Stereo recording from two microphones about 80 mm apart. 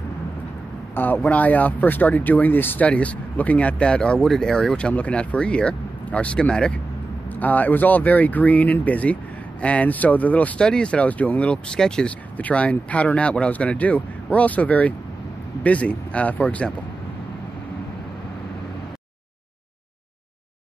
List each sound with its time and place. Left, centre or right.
0.9 s speech: left